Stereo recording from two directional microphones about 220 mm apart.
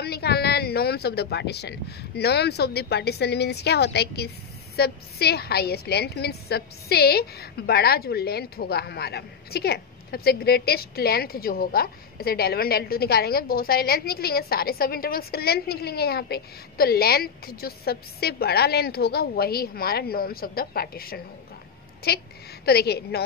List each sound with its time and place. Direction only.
0.0 s a woman's voice: 45° left (ahead or behind)